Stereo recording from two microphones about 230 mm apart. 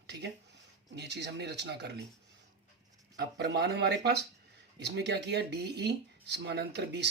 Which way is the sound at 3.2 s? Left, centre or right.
Right.